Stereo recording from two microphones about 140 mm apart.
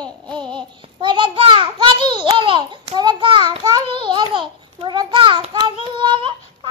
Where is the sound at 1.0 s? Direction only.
35° right (ahead or behind).